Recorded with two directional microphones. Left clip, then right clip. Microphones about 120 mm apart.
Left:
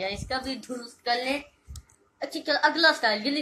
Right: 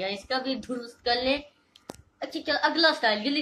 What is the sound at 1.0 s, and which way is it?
Speech, 40° right (ahead or behind).